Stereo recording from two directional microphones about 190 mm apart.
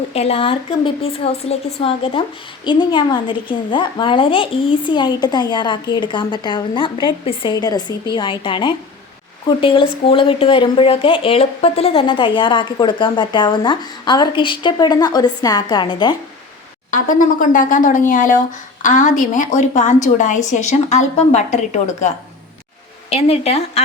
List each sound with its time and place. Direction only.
0.1 s a woman's voice: 30° left (ahead or behind)
16.9 s a woman's voice: 45° left (ahead or behind)